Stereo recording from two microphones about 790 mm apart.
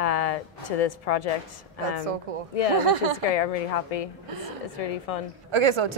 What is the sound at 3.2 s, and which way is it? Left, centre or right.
Speech, left.